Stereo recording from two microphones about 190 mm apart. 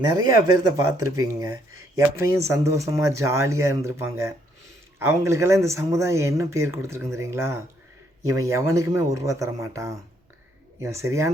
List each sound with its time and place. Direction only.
0.3 s speech: 20° right (ahead or behind)